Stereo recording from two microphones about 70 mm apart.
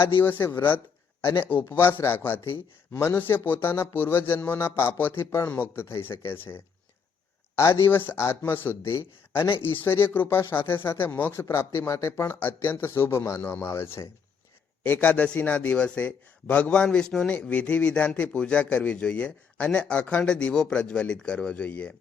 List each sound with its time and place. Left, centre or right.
0.0 s a man's voice: left
1.2 s speech: left
4.4 s a man's voice: left
4.6 s speech: left
7.9 s a man's voice: left
14.8 s a man's voice: left